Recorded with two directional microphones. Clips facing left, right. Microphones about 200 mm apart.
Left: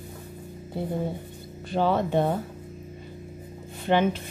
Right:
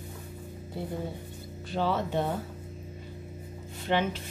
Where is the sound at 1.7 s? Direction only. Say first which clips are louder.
Left 5 dB; 55° left (ahead or behind).